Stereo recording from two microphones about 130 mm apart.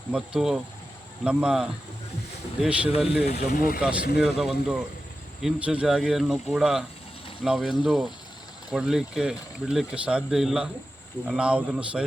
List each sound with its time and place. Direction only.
0.1 s a man's voice: 5° right (ahead or behind)
3.3 s speech: 65° left (ahead or behind)
3.8 s a man's voice: 5° right (ahead or behind)